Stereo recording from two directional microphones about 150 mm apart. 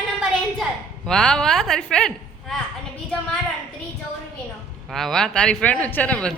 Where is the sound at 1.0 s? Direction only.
5° left (ahead or behind).